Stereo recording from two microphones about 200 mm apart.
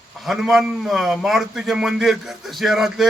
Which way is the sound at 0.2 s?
Centre (ahead or behind).